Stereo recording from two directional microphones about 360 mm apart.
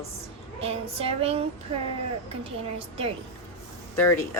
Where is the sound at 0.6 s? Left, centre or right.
Centre.